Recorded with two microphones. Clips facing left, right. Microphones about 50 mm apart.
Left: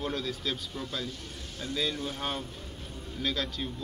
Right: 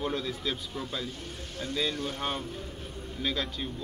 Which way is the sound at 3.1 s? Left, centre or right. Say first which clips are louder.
Even; centre.